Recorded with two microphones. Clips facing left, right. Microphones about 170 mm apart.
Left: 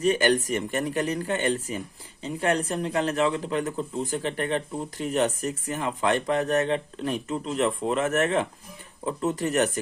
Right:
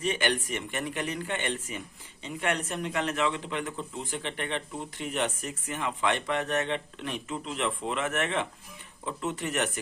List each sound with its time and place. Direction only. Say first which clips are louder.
0.0 s a man's voice: left 7 dB; 40° left (ahead or behind)